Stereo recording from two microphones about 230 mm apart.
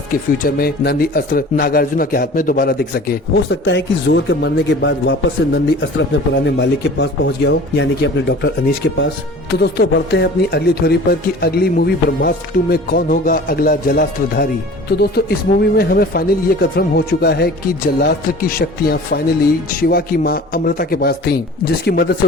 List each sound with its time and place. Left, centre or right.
0.1 s speech: left